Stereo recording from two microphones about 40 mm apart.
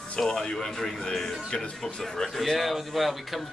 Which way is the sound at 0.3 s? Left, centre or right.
Centre.